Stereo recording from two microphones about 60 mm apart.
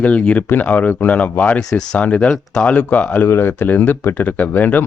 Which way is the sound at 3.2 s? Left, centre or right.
Left.